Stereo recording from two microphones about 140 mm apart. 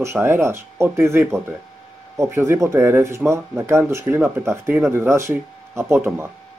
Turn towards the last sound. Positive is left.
turn(degrees=-20)  # may be behind; listen again after turning